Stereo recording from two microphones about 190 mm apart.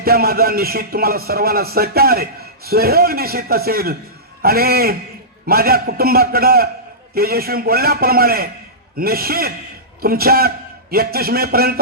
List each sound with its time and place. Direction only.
0.0 s speech: 55° right (ahead or behind)